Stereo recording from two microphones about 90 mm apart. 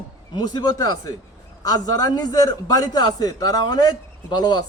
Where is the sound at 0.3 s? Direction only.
50° left (ahead or behind).